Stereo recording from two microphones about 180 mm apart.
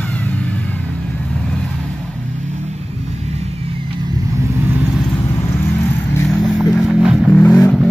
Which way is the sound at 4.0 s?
15° right (ahead or behind).